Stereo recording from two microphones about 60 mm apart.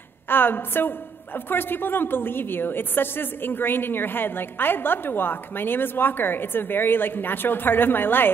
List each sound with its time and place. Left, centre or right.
0.3 s a woman's voice: left